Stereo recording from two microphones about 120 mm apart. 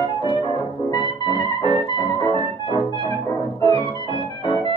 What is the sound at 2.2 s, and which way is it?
Music, 40° left (ahead or behind).